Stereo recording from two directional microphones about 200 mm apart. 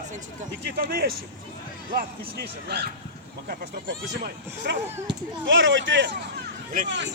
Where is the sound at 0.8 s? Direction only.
50° right (ahead or behind).